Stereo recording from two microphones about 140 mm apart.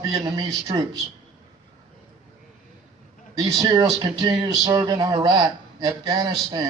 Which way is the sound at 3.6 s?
30° right (ahead or behind).